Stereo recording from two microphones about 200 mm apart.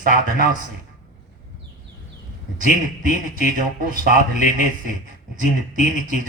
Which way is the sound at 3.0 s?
40° right (ahead or behind).